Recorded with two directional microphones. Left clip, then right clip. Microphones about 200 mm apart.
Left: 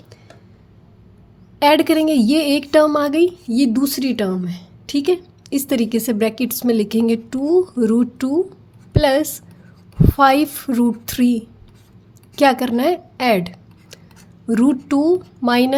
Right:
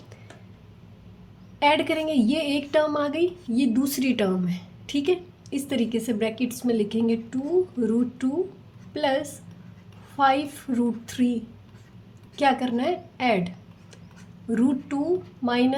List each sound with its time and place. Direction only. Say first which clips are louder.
1.5 s a woman's voice: left 8 dB; 35° left (ahead or behind)
14.5 s a woman's voice: left 8 dB; 40° left (ahead or behind)